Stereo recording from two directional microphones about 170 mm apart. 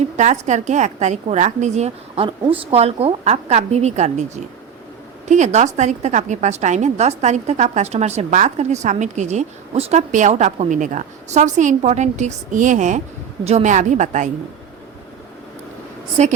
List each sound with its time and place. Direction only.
0.2 s a woman's voice: 45° right (ahead or behind)
5.3 s a woman's voice: 45° right (ahead or behind)
16.2 s a woman's voice: 40° right (ahead or behind)